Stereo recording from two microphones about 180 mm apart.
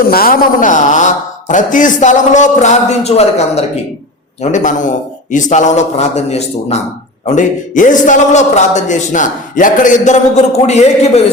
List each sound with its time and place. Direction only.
0.1 s a man's voice: 55° left (ahead or behind); by 11.2 s 35° left (ahead or behind)